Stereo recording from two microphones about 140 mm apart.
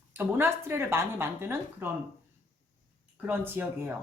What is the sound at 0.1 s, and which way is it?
Speech, 15° right (ahead or behind).